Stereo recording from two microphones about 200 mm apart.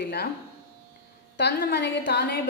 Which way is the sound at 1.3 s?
55° left (ahead or behind).